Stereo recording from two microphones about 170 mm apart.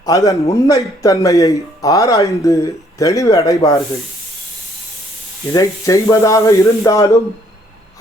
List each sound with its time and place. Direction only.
0.0 s a man's voice: 20° left (ahead or behind)
5.5 s a man's voice: 20° left (ahead or behind)